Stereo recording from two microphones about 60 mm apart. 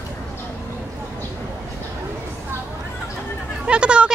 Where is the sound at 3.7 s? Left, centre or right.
Centre.